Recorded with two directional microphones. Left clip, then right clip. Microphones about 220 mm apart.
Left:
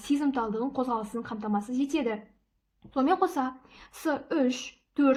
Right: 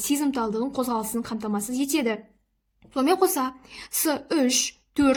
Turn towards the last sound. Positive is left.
turn(degrees=-40)  # may be behind; listen again after turning